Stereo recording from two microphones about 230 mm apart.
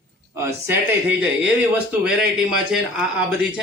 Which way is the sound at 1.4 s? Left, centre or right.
Centre.